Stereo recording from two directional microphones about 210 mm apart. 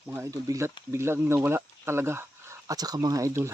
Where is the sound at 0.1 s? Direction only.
15° right (ahead or behind).